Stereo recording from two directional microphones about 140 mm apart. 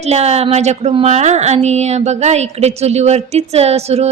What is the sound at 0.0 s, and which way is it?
Speech, 50° right (ahead or behind).